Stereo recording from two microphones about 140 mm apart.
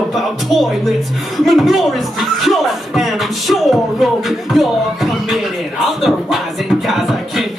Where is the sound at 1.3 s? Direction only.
Centre (ahead or behind).